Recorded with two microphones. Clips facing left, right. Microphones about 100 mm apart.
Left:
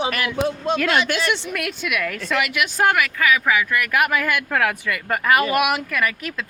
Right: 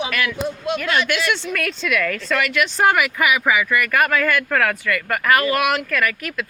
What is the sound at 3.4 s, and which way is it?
Speech, 5° right (ahead or behind).